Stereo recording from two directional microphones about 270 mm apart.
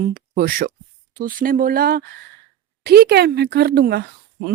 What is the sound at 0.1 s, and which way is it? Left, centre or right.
Speech, right.